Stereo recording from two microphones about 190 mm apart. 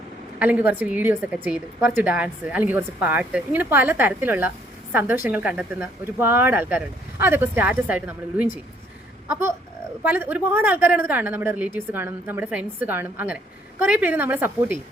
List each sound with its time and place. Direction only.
0.3 s a woman's voice: 10° right (ahead or behind)